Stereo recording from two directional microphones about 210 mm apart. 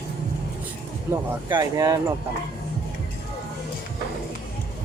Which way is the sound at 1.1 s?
15° right (ahead or behind).